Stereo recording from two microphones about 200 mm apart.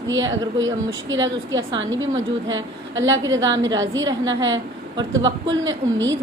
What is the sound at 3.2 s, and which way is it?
Speech, 15° right (ahead or behind).